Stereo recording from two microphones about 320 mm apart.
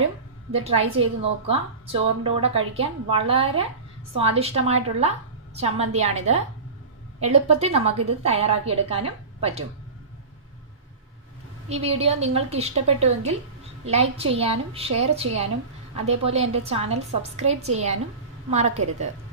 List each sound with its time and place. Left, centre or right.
0.5 s a woman's voice: centre
7.2 s a woman's voice: right
11.7 s a woman's voice: centre